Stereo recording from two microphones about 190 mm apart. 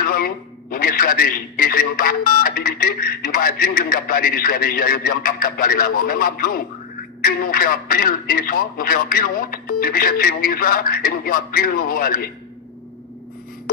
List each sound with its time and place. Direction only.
0.0 s a man's voice: 50° left (ahead or behind)